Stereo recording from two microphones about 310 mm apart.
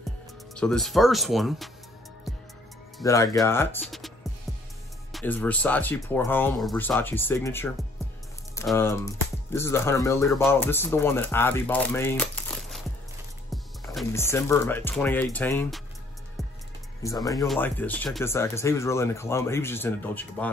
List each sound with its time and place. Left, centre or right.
0.6 s speech: centre
3.0 s speech: centre
5.1 s speech: centre
17.0 s speech: centre